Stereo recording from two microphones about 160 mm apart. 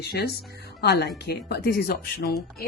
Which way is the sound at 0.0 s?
80° left.